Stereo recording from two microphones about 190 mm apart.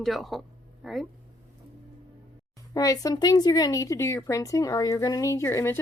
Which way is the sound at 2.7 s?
20° left (ahead or behind).